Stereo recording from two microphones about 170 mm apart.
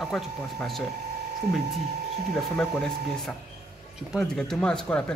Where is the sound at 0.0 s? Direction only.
Centre (ahead or behind).